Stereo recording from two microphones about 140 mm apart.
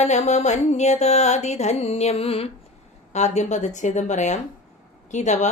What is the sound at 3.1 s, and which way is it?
A woman's voice, 55° left (ahead or behind).